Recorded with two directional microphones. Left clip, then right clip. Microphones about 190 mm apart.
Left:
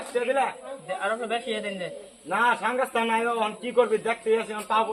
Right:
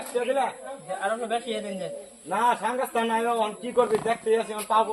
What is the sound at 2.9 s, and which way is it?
Speech, 10° right (ahead or behind).